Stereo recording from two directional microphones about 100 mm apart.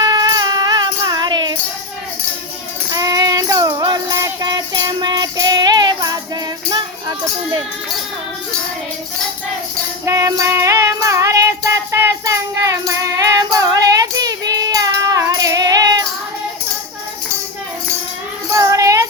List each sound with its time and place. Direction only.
0.0 s music: 40° right (ahead or behind)
2.9 s child singing: 40° right (ahead or behind)
6.7 s music: 45° right (ahead or behind)
10.1 s music: 35° right (ahead or behind)
18.5 s child singing: 35° right (ahead or behind)